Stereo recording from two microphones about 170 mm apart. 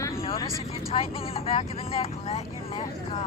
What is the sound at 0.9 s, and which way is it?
Speech, 35° left (ahead or behind).